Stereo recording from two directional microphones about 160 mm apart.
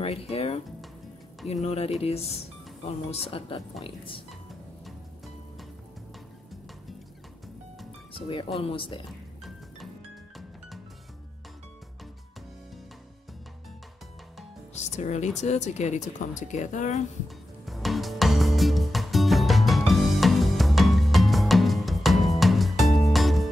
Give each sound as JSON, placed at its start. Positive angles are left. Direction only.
{"t": 0.0, "sound": "speech", "side_deg": 40}
{"t": 4.8, "sound": "music", "side_deg": 0}
{"t": 8.1, "sound": "speech", "side_deg": 35}
{"t": 14.7, "sound": "speech", "side_deg": 45}
{"t": 17.6, "sound": "music", "side_deg": 0}